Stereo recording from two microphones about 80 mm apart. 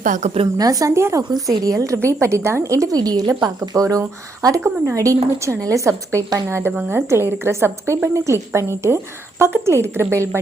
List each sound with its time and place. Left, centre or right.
0.5 s a woman's voice: right
6.5 s a woman's voice: right